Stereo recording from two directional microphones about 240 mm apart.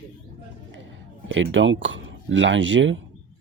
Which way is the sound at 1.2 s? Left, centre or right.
Right.